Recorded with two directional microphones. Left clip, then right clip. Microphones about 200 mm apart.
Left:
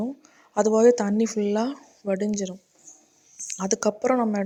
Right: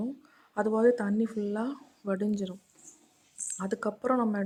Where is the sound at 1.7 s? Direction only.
10° left (ahead or behind).